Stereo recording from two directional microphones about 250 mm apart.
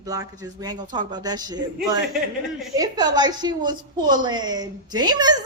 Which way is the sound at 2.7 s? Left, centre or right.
Centre.